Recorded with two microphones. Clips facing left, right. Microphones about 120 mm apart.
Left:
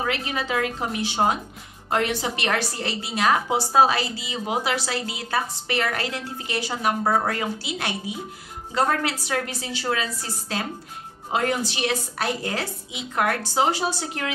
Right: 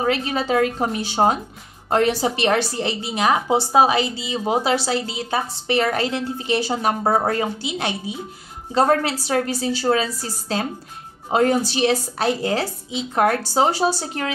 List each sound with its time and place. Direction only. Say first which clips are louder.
0.0 s a woman's voice: right 5 dB; 35° right (ahead or behind)
11.3 s a woman's voice: right 6 dB; 35° right (ahead or behind)